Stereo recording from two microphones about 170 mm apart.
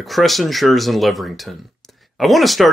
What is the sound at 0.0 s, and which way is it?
Speech, centre (ahead or behind).